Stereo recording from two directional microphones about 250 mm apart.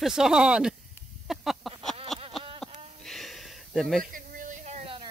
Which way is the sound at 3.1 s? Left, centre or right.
Centre.